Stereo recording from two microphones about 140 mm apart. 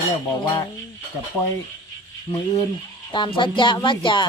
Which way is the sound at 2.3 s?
45° left (ahead or behind).